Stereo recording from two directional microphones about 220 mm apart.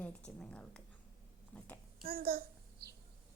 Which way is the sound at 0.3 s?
5° left (ahead or behind).